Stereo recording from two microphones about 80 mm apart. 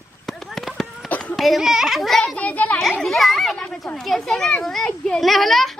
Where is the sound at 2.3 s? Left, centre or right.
Centre.